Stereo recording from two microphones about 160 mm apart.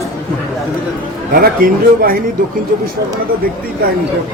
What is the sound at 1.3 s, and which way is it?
Speech, 65° right (ahead or behind).